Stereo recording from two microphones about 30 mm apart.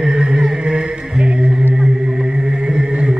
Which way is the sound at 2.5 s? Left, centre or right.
Right.